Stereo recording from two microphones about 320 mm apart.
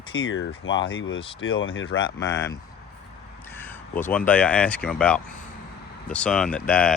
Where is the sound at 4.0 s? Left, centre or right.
Centre.